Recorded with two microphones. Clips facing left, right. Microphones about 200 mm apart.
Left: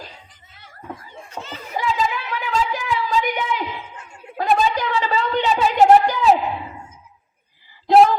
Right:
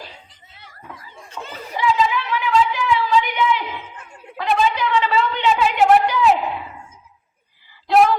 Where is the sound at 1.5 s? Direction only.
45° left (ahead or behind).